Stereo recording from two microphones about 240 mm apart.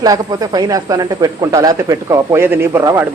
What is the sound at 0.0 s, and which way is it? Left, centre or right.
Speech, centre.